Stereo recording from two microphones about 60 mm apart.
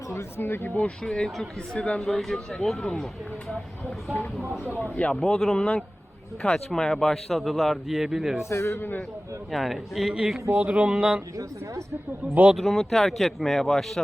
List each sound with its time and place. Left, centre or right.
0.1 s speech: left
0.8 s speech: centre
4.8 s speech: left
5.2 s a man's voice: centre
8.4 s a man's voice: left
8.8 s a man's voice: left
9.5 s a man's voice: centre
10.5 s speech: right
12.5 s a man's voice: centre